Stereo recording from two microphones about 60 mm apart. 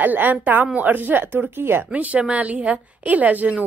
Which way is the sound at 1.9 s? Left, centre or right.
Right.